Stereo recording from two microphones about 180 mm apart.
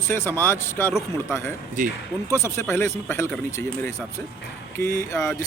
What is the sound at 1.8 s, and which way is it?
Speech, 45° right (ahead or behind).